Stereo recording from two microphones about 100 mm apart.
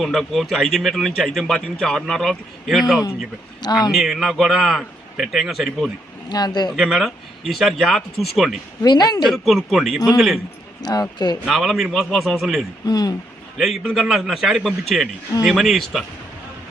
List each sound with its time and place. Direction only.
0.0 s speech: centre (ahead or behind)
6.2 s speech: 45° left (ahead or behind)
6.7 s speech: 5° right (ahead or behind)
8.8 s speech: 40° left (ahead or behind)
9.2 s speech: centre (ahead or behind)
10.8 s speech: 40° left (ahead or behind)
11.4 s speech: centre (ahead or behind)
12.8 s speech: 40° left (ahead or behind)
13.6 s speech: centre (ahead or behind)